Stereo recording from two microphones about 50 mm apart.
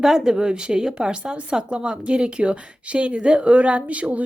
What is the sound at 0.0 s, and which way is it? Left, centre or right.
Speech, centre.